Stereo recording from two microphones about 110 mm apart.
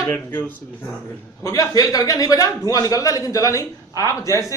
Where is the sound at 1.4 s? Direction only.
30° left (ahead or behind).